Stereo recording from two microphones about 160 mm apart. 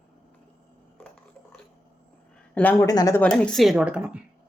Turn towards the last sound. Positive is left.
turn(degrees=-5)  # may be behind; listen again after turning